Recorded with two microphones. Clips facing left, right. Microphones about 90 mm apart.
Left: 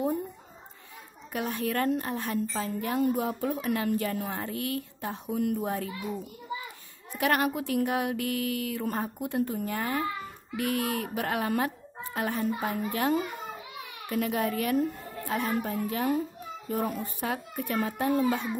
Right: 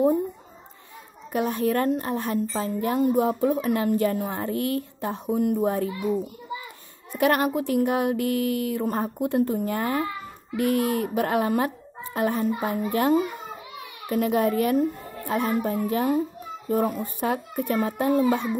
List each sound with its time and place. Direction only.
1.3 s a woman's voice: 30° right (ahead or behind)
7.1 s a woman's voice: 40° right (ahead or behind)
16.8 s a child's voice: 20° right (ahead or behind)
17.3 s a child's voice: 30° right (ahead or behind)